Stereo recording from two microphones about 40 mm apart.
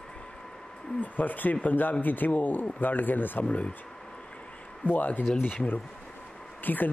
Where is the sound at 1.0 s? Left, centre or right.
Left.